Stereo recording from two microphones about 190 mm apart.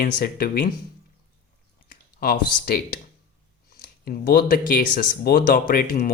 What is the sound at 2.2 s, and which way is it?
Speech, 50° left (ahead or behind).